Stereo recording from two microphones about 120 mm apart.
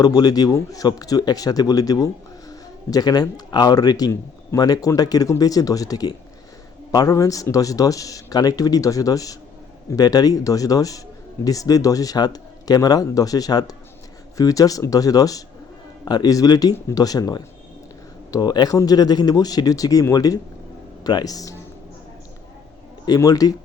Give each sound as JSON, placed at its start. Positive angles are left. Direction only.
{"t": 0.0, "sound": "speech", "side_deg": 35}
{"t": 23.0, "sound": "speech", "side_deg": 30}